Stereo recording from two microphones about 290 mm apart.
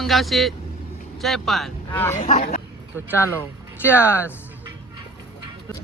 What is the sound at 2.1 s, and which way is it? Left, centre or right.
Speech, left.